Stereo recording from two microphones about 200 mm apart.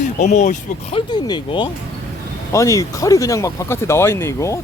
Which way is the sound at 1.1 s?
20° left (ahead or behind).